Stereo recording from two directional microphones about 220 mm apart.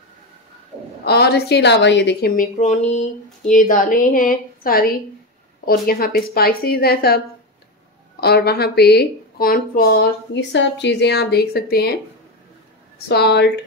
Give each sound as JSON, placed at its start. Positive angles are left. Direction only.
{"t": 1.0, "sound": "speech", "side_deg": 45}
{"t": 2.3, "sound": "speech", "side_deg": 30}
{"t": 8.2, "sound": "speech", "side_deg": 45}
{"t": 13.1, "sound": "speech", "side_deg": 50}